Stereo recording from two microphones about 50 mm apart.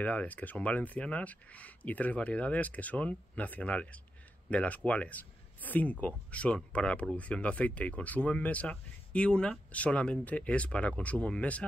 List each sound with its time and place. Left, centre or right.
0.0 s speech: left